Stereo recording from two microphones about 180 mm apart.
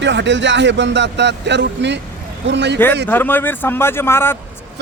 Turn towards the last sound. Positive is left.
turn(degrees=15)  # may be behind; listen again after turning